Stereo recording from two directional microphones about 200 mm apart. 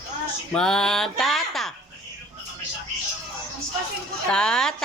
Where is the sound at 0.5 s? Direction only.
5° left (ahead or behind).